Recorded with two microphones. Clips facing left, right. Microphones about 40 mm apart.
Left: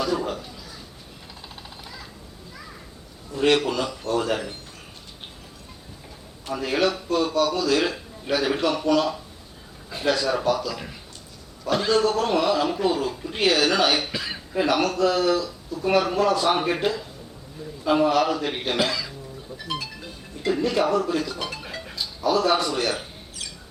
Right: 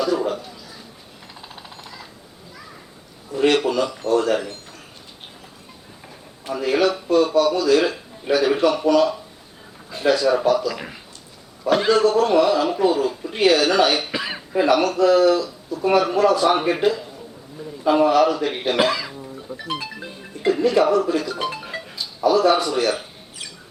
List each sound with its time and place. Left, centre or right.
0.0 s a sound: centre
1.4 s vehicle: centre
3.3 s speech: centre
6.4 s speech: centre
11.6 s a man's voice: centre
12.0 s speech: centre
14.1 s cough: right
14.5 s speech: centre
18.8 s speech: right
20.7 s speech: centre
21.3 s speech: right
21.8 s a man's voice: centre